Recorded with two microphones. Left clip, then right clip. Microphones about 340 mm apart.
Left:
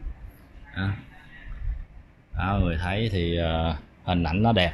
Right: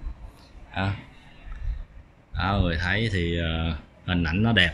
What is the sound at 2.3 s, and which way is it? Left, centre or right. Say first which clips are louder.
Speech: right 2 dB; centre.